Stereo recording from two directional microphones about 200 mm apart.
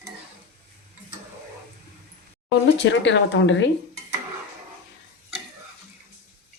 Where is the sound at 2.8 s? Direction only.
65° left (ahead or behind).